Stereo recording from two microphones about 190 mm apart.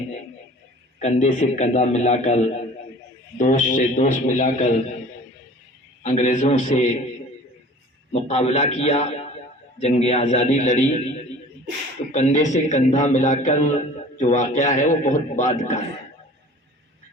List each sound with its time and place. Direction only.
0.9 s a man's voice: 40° left (ahead or behind)
6.0 s a man's voice: 35° left (ahead or behind)
8.1 s a man's voice: 35° left (ahead or behind)
12.1 s a man's voice: 40° left (ahead or behind)